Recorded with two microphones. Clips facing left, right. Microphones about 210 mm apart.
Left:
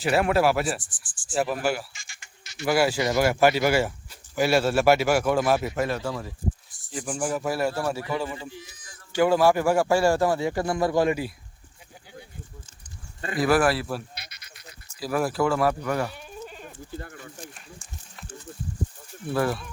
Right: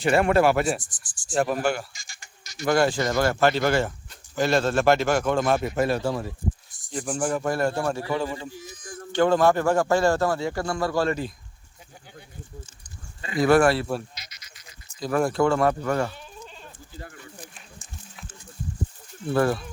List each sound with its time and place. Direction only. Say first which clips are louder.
0.0 s speech: right 2 dB; 5° left (ahead or behind)
0.8 s speech: right 2 dB; 40° right (ahead or behind)
1.3 s speech: right 2 dB; 5° left (ahead or behind)
1.9 s frog: right 1 dB; 40° right (ahead or behind)
2.6 s speech: right 1 dB; 5° left (ahead or behind)
5.7 s speech: right 3 dB; 30° right (ahead or behind)
6.9 s speech: right 2 dB; 5° left (ahead or behind)
8.5 s a sound: right 6 dB; 50° right (ahead or behind)
9.1 s speech: even; 10° left (ahead or behind)
13.3 s speech: right 3 dB; centre (ahead or behind)
14.2 s goat: left 2 dB; 60° left (ahead or behind)
15.0 s speech: right 2 dB; 5° left (ahead or behind)
19.3 s speech: right 3 dB; centre (ahead or behind)